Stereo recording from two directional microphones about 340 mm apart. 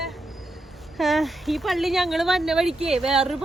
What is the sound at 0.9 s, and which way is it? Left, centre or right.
Speech, centre.